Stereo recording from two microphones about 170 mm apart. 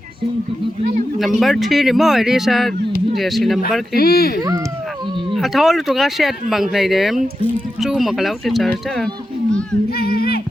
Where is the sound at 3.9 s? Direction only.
60° left (ahead or behind).